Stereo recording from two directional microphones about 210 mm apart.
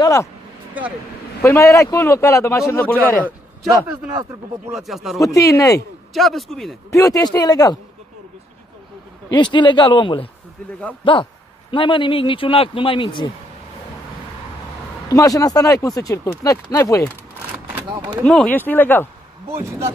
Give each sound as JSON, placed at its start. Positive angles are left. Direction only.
{"t": 0.0, "sound": "speech", "side_deg": 15}
{"t": 1.4, "sound": "speech", "side_deg": 10}
{"t": 4.7, "sound": "a man's voice", "side_deg": 0}
{"t": 5.2, "sound": "speech", "side_deg": 15}
{"t": 6.1, "sound": "a man's voice", "side_deg": 0}
{"t": 6.9, "sound": "speech", "side_deg": 15}
{"t": 9.3, "sound": "speech", "side_deg": 20}
{"t": 15.0, "sound": "speech", "side_deg": 15}
{"t": 17.7, "sound": "speech", "side_deg": -20}
{"t": 18.2, "sound": "speech", "side_deg": 5}
{"t": 19.5, "sound": "speech", "side_deg": -10}